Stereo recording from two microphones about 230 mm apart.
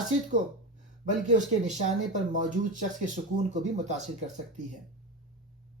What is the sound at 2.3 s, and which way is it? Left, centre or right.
Speech, right.